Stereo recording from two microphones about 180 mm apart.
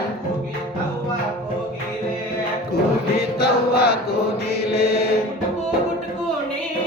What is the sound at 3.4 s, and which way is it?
Chant, 60° left (ahead or behind).